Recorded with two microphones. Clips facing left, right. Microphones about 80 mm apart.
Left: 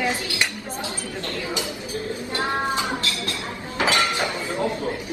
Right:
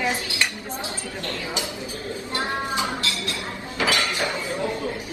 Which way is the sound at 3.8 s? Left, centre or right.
Left.